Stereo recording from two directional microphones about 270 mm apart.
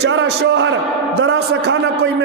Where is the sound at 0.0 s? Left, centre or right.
Right.